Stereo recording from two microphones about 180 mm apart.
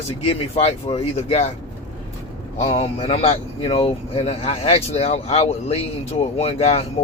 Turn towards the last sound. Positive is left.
turn(degrees=35)  # may be behind; listen again after turning